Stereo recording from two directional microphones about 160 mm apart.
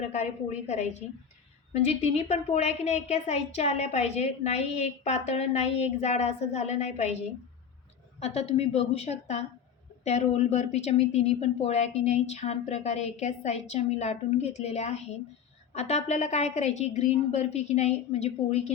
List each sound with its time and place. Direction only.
0.0 s a woman's voice: 45° left (ahead or behind)
1.7 s a woman's voice: 40° left (ahead or behind)
8.2 s a woman's voice: 40° left (ahead or behind)